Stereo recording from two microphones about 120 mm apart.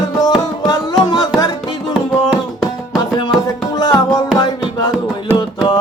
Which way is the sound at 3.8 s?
30° left (ahead or behind).